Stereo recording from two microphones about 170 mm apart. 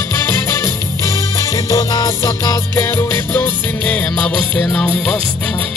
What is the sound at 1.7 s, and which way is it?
Music, 20° left (ahead or behind).